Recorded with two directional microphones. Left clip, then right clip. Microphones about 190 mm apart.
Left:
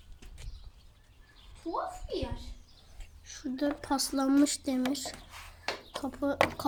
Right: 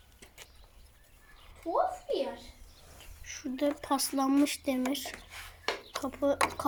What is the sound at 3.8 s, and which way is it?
A woman's voice, 5° right (ahead or behind).